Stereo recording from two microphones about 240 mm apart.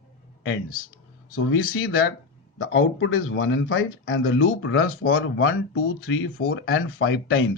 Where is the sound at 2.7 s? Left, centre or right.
Left.